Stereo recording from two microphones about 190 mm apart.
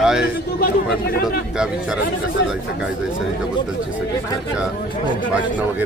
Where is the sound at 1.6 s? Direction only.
5° right (ahead or behind).